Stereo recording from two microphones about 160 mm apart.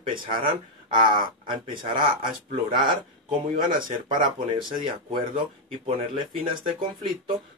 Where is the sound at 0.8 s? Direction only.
30° right (ahead or behind).